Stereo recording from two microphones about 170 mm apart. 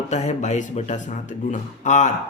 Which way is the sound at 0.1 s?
45° left (ahead or behind).